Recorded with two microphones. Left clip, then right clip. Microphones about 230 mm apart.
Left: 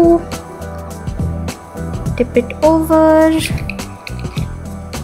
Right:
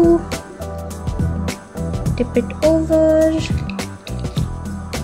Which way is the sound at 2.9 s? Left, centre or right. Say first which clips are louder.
Left 5 dB; centre.